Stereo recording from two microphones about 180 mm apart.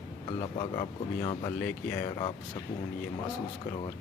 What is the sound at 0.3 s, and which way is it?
Speech, 30° left (ahead or behind).